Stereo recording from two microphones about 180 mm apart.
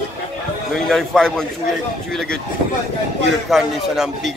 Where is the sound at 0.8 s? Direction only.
Centre (ahead or behind).